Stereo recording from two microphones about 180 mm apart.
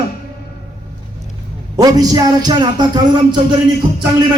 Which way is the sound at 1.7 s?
20° right (ahead or behind).